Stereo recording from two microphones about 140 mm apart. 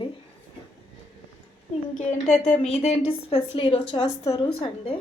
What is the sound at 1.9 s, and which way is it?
A woman's voice, 60° left (ahead or behind).